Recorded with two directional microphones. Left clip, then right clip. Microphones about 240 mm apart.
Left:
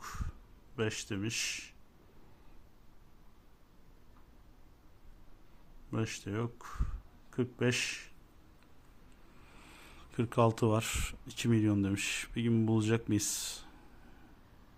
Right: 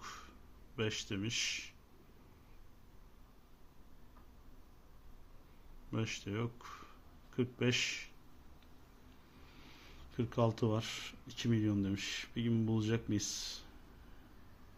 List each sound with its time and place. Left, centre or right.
0.0 s a sound: left
0.8 s speech: left
5.9 s speech: left
10.0 s speech: left